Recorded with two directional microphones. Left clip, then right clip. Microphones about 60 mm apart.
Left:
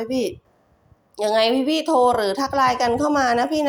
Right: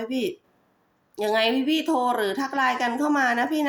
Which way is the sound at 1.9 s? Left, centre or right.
Left.